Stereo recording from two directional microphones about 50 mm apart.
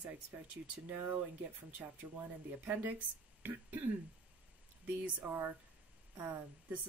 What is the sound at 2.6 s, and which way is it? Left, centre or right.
Speech, right.